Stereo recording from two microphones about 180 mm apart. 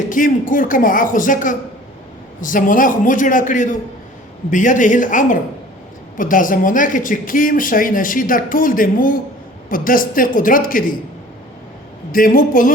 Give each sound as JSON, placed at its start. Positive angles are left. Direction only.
{"t": 0.1, "sound": "speech", "side_deg": 50}
{"t": 12.1, "sound": "speech", "side_deg": 50}